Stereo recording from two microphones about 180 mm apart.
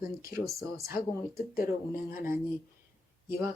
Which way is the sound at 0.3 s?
15° right (ahead or behind).